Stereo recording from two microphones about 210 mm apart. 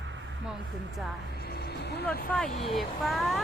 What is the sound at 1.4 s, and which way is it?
Music, 45° left (ahead or behind).